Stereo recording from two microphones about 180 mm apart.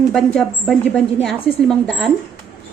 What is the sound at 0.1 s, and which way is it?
A woman's voice, 5° left (ahead or behind).